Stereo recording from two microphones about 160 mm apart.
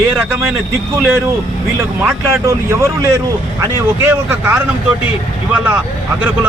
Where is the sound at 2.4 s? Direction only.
20° right (ahead or behind).